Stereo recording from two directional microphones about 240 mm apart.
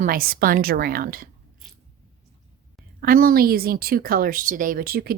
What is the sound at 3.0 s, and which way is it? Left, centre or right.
A woman's voice, right.